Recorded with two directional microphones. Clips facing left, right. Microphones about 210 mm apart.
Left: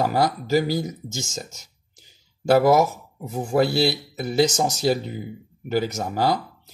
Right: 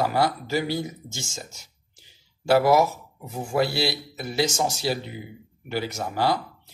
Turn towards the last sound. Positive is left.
turn(degrees=45)  # may be behind; listen again after turning